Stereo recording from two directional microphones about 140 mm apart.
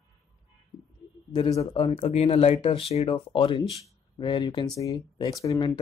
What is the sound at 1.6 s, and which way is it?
Speech, 40° left (ahead or behind).